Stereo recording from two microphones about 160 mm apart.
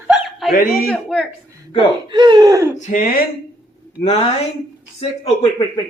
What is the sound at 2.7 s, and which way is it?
Speech, 55° left (ahead or behind).